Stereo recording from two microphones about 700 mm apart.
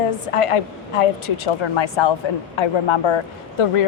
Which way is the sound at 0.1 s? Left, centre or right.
Left.